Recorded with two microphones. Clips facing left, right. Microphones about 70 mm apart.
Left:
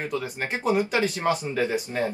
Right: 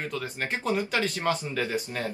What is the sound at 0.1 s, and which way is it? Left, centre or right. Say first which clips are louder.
Speech: left 3 dB; centre.